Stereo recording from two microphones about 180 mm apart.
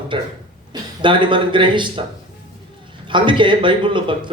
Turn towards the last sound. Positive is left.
turn(degrees=-25)  # may be behind; listen again after turning